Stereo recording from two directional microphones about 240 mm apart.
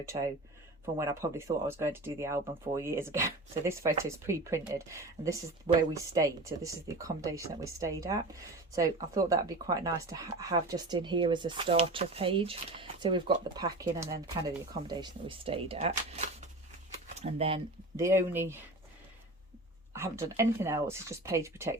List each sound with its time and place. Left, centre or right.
0.1 s speech: right
17.9 s speech: centre
19.9 s speech: centre